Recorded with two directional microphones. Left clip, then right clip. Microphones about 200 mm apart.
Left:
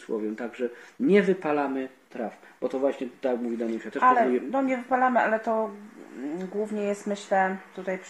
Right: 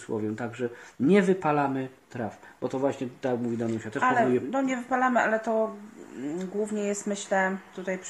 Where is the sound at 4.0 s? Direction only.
30° left (ahead or behind).